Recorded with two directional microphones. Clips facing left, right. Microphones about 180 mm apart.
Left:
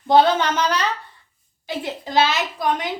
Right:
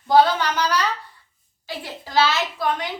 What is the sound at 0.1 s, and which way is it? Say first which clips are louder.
A woman's voice: left 1 dB; 25° left (ahead or behind).